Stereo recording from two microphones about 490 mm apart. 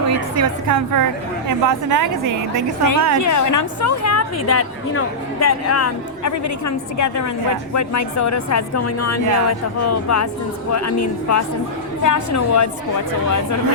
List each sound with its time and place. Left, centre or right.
0.3 s a woman's voice: right
3.2 s a woman's voice: left